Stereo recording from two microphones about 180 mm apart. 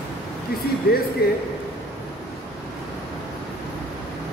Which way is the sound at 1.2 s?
60° left (ahead or behind).